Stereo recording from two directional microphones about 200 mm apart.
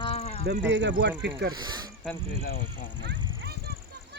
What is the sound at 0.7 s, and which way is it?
Speech, 70° right (ahead or behind).